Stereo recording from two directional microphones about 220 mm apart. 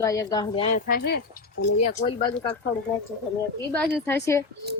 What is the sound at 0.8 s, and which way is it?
Speech, 45° left (ahead or behind).